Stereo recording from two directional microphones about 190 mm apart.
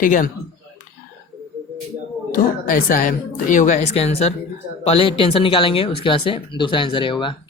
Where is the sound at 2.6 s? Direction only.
45° left (ahead or behind).